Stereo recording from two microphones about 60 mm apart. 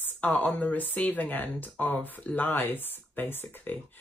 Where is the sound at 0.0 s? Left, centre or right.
Left.